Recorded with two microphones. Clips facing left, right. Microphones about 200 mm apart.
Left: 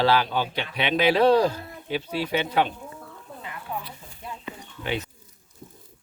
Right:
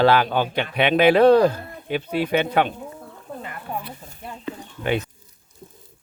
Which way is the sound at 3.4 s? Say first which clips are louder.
Right 2 dB; 55° right (ahead or behind).